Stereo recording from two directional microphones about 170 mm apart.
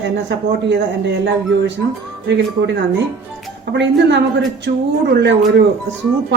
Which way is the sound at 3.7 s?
90° right.